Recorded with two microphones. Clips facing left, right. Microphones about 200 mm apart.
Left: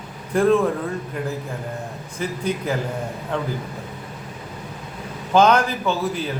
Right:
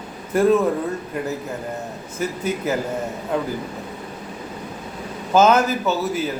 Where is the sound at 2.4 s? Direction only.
5° right (ahead or behind).